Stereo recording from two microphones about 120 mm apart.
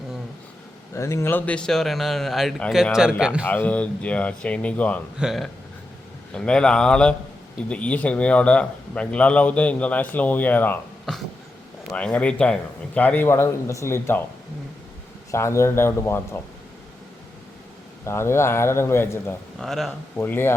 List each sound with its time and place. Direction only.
0.9 s a man's voice: 25° left (ahead or behind); by 3.4 s 5° right (ahead or behind)
3.4 s a man's voice: 15° left (ahead or behind)
5.2 s a man's voice: centre (ahead or behind); by 10.8 s 15° left (ahead or behind)
11.9 s a man's voice: 10° left (ahead or behind)
15.3 s a man's voice: 25° left (ahead or behind)
18.0 s a man's voice: 20° left (ahead or behind)
19.5 s a man's voice: centre (ahead or behind)
20.1 s a man's voice: 20° left (ahead or behind)